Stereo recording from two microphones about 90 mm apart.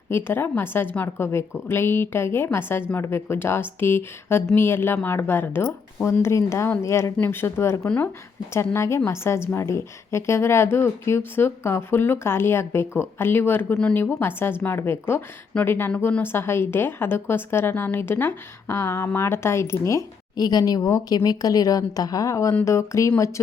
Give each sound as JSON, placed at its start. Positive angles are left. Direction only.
{"t": 0.1, "sound": "a woman's voice", "side_deg": 25}